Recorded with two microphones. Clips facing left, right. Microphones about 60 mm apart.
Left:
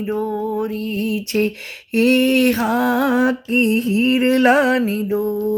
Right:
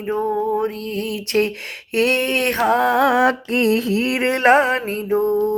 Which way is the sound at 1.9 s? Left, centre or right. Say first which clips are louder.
Left 4 dB; right.